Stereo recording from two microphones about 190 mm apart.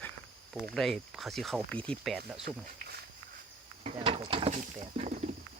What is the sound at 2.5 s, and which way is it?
Speech, 55° right (ahead or behind).